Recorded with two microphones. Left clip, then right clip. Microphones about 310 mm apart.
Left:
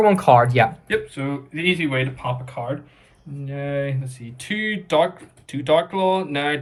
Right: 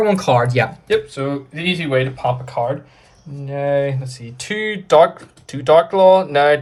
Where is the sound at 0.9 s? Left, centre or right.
Centre.